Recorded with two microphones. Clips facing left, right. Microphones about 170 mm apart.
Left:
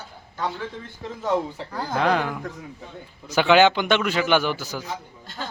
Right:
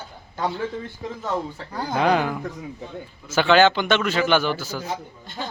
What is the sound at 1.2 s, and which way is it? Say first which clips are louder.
Speech: left 4 dB; 15° left (ahead or behind).